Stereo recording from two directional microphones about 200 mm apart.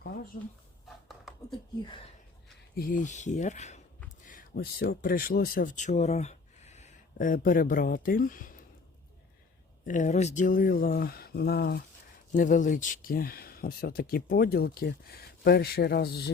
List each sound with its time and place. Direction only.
1.0 s a sound: centre (ahead or behind)
2.7 s speech: 45° left (ahead or behind)
9.8 s speech: 40° left (ahead or behind); by 11.8 s 55° left (ahead or behind)
12.3 s speech: 40° left (ahead or behind)